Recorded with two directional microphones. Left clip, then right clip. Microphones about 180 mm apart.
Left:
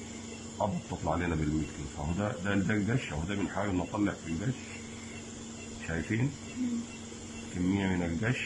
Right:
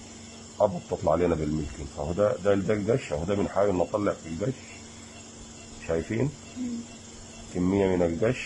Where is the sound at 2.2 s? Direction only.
25° right (ahead or behind).